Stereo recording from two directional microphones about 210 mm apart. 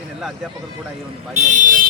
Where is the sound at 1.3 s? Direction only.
35° right (ahead or behind).